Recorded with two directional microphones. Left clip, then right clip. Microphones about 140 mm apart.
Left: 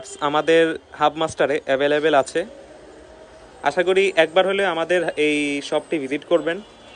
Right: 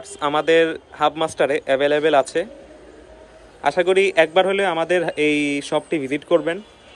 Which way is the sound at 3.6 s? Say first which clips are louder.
Right 1 dB; 15° left (ahead or behind).